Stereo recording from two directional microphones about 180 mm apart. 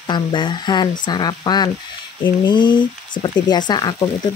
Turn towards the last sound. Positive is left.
turn(degrees=25)  # may be behind; listen again after turning